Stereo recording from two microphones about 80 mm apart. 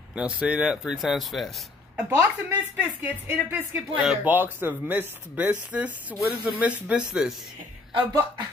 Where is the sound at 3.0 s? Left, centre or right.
Right.